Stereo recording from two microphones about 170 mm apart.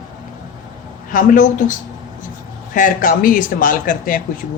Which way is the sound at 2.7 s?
50° left (ahead or behind).